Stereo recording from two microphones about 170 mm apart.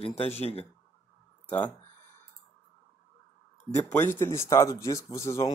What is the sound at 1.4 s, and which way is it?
Speech, 10° left (ahead or behind).